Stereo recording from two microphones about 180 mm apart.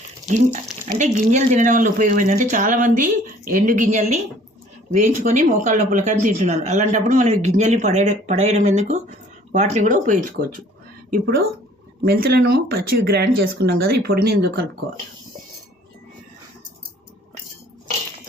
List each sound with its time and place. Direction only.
0.3 s speech: 40° right (ahead or behind)
11.1 s speech: 55° right (ahead or behind)